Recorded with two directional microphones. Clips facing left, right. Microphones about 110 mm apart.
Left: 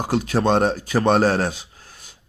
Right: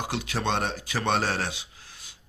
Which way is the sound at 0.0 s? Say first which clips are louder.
Left 9 dB; 40° left (ahead or behind).